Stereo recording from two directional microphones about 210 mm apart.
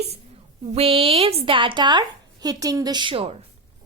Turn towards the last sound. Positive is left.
turn(degrees=-25)  # may be behind; listen again after turning